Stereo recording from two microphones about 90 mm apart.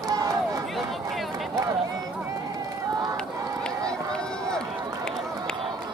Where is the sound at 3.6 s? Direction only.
10° left (ahead or behind).